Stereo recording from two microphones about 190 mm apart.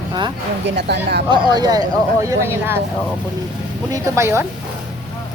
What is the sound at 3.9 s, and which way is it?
Speech, 15° right (ahead or behind).